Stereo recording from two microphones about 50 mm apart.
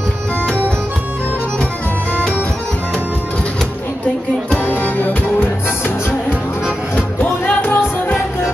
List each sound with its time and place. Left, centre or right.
4.6 s music: left
7.4 s music: left